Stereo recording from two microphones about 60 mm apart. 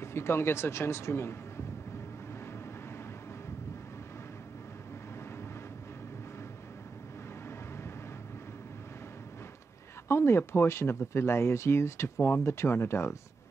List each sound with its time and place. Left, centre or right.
0.0 s speech: left
7.4 s vehicle: left
10.0 s speech: left